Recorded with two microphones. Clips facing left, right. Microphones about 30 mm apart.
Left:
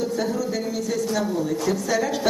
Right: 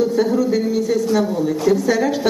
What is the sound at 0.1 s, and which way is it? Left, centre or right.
Speech, centre.